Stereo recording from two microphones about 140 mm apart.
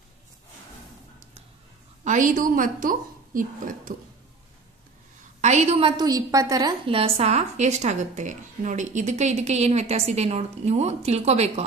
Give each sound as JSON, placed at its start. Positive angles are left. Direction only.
{"t": 2.0, "sound": "a woman's voice", "side_deg": -65}
{"t": 5.4, "sound": "a woman's voice", "side_deg": -55}
{"t": 5.9, "sound": "a woman's voice", "side_deg": -30}
{"t": 6.9, "sound": "a woman's voice", "side_deg": -45}